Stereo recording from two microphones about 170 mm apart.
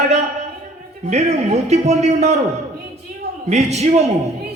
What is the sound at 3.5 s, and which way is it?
Speech, 40° right (ahead or behind).